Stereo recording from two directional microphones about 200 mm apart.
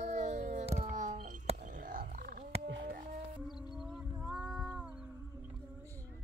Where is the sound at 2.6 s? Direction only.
55° right (ahead or behind).